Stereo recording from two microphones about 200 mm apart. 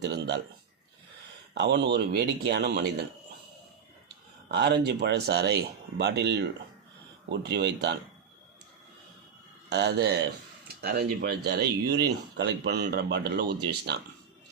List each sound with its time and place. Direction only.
0.0 s speech: 60° right (ahead or behind)
1.5 s speech: 60° right (ahead or behind)
4.4 s speech: 55° right (ahead or behind)
9.6 s speech: 55° right (ahead or behind)